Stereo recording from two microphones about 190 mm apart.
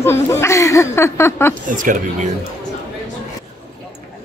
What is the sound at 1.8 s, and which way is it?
Speech, 45° right (ahead or behind).